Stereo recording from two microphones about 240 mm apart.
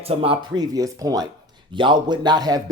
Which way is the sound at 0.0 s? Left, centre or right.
Right.